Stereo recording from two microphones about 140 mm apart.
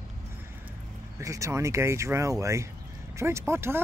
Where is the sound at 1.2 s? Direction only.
20° right (ahead or behind).